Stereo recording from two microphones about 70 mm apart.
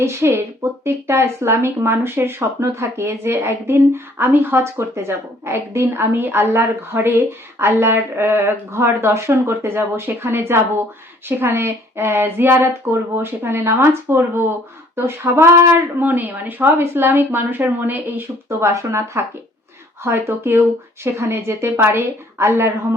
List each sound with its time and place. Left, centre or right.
0.0 s a woman's voice: right
18.4 s speech: right